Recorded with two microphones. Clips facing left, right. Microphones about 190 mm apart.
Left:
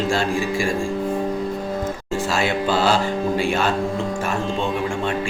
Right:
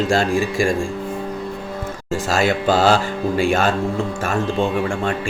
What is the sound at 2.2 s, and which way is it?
Speech, 45° right (ahead or behind).